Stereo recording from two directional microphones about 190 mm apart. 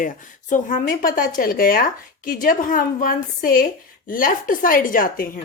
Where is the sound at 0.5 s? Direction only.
45° left (ahead or behind).